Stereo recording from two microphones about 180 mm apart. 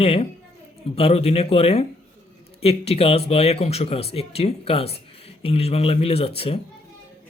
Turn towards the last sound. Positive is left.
turn(degrees=30)  # may be behind; listen again after turning